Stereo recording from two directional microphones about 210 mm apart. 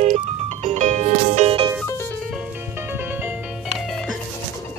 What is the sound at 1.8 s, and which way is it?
Music, 10° left (ahead or behind).